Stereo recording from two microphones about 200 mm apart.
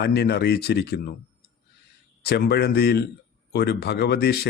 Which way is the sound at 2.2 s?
55° left (ahead or behind).